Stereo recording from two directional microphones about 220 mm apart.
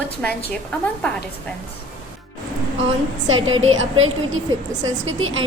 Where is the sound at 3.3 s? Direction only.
65° right (ahead or behind).